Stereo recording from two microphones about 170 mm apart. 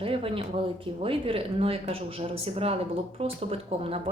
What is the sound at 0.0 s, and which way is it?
A woman's voice, 30° right (ahead or behind).